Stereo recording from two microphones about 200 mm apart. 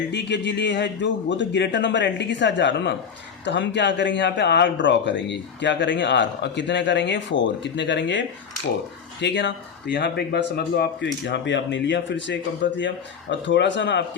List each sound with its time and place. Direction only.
0.1 s speech: 60° left (ahead or behind)
9.2 s speech: 60° left (ahead or behind)